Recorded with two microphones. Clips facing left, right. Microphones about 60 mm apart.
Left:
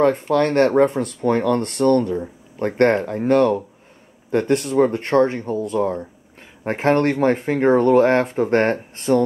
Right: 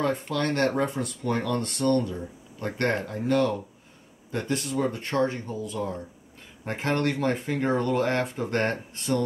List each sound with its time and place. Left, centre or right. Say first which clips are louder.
0.0 s speech: left 10 dB; left